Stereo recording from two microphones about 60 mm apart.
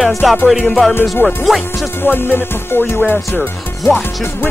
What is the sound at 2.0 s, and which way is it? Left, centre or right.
Speech, left.